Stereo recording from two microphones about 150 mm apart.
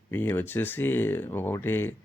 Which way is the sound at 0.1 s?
15° left (ahead or behind).